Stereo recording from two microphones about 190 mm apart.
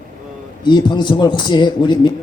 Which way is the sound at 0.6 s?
25° left (ahead or behind).